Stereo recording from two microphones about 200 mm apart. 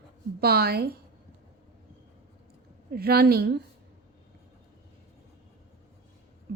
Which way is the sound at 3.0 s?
50° right (ahead or behind).